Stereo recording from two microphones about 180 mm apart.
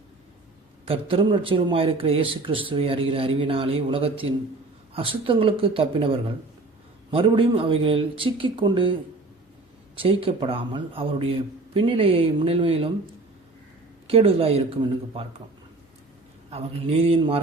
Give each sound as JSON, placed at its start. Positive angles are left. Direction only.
{"t": 0.9, "sound": "speech", "side_deg": -30}
{"t": 10.0, "sound": "speech", "side_deg": -30}
{"t": 14.1, "sound": "speech", "side_deg": -30}
{"t": 16.5, "sound": "speech", "side_deg": -35}